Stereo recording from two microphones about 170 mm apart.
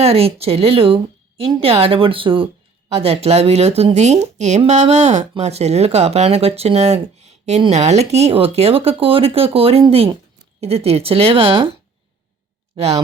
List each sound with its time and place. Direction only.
0.0 s speech: 35° right (ahead or behind)
12.7 s speech: 35° right (ahead or behind)